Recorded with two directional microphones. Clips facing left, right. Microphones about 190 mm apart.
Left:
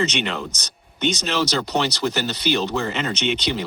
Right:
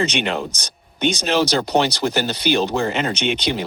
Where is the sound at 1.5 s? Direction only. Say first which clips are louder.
Right 4 dB; 55° right (ahead or behind).